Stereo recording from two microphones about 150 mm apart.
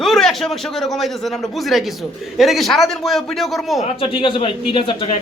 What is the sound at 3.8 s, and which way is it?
Speech, 40° left (ahead or behind).